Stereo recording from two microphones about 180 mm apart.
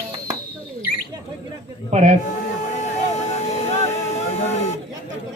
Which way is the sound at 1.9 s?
40° right (ahead or behind).